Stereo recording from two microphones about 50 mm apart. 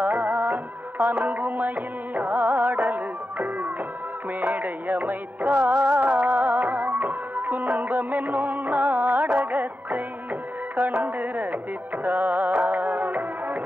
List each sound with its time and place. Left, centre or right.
0.0 s music: right
12.0 s music of bollywood: right